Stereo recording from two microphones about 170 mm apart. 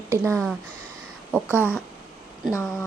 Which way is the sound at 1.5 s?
15° left (ahead or behind).